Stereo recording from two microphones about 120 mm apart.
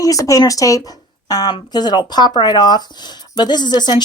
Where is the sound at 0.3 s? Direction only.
30° left (ahead or behind).